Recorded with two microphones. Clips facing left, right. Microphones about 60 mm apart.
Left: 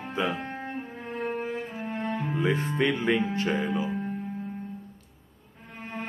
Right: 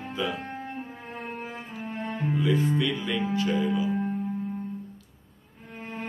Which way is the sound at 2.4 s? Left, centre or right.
Left.